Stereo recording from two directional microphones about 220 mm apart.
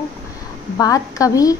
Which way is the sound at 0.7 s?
15° left (ahead or behind).